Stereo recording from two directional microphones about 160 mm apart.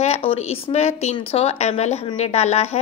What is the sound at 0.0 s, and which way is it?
A woman's voice, 40° left (ahead or behind).